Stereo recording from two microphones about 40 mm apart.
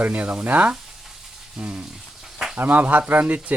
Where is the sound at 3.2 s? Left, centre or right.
Right.